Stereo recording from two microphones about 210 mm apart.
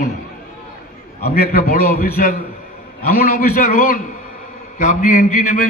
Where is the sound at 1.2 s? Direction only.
45° left (ahead or behind).